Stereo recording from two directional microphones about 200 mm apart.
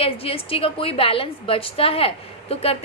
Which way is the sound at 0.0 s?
30° left (ahead or behind).